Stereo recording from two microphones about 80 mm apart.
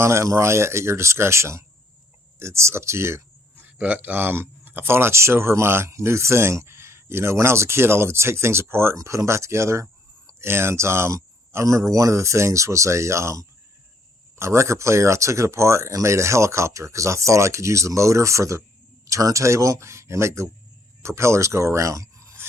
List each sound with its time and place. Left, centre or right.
0.0 s speech: right
3.6 s speech: right